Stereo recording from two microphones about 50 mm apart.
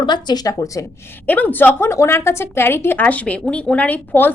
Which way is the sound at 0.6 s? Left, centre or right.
Left.